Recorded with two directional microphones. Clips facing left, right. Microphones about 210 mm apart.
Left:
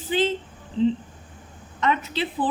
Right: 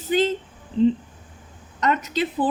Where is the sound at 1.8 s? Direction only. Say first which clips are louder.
Right 2 dB; 45° right (ahead or behind).